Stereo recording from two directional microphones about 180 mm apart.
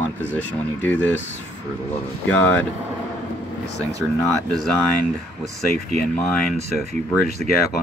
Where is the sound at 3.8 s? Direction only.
20° right (ahead or behind).